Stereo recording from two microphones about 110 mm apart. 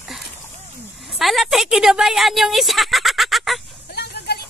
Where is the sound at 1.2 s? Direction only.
Centre (ahead or behind).